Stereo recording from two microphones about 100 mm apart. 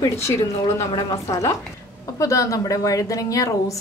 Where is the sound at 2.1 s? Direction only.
30° left (ahead or behind).